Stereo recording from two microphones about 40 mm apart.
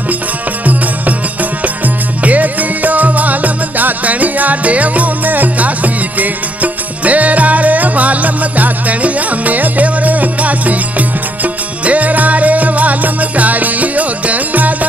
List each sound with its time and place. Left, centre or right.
0.7 s music: right